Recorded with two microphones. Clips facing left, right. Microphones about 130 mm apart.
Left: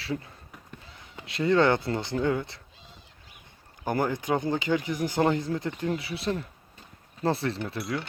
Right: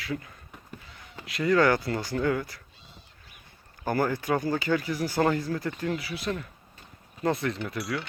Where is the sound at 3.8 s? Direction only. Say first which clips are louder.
Right 1 dB; 20° left (ahead or behind).